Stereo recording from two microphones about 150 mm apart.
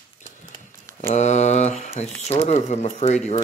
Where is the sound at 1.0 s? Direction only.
50° left (ahead or behind).